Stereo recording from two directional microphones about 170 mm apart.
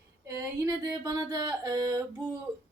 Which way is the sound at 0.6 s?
20° right (ahead or behind).